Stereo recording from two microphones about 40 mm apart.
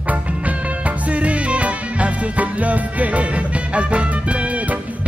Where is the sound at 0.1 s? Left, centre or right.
Right.